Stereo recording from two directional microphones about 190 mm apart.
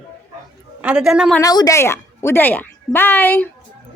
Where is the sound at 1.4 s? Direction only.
20° left (ahead or behind).